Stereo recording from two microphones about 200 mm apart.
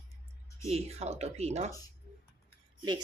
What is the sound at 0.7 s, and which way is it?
Speech, 30° right (ahead or behind).